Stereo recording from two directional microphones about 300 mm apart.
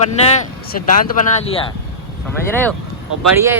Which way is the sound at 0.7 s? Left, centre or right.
Left.